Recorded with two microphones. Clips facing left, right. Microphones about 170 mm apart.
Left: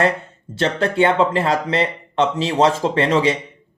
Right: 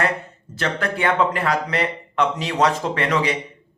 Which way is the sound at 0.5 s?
30° left (ahead or behind).